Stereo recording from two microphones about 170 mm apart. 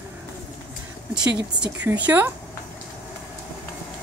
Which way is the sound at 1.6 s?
10° right (ahead or behind).